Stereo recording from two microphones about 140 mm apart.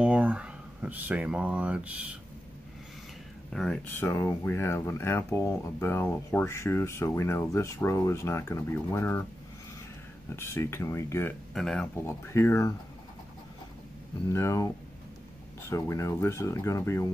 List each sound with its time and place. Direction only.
0.0 s speech: 10° right (ahead or behind)
3.5 s speech: 5° left (ahead or behind)
10.3 s speech: 15° left (ahead or behind)
11.5 s speech: 5° left (ahead or behind)
12.3 s speech: 20° left (ahead or behind)
14.3 s speech: 20° left (ahead or behind)